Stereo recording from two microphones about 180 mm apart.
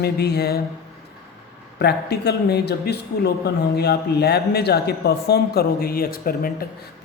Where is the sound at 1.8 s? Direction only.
65° left (ahead or behind).